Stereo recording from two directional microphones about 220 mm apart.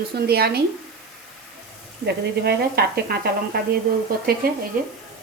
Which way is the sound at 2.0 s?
45° right (ahead or behind).